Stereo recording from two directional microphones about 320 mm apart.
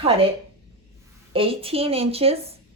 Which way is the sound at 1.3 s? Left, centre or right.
Centre.